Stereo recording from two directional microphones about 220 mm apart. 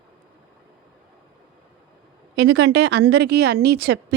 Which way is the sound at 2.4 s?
50° right (ahead or behind).